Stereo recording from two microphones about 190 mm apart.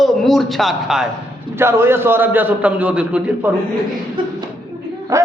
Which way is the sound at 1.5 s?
15° right (ahead or behind).